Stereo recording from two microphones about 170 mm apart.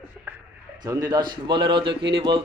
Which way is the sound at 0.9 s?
20° right (ahead or behind).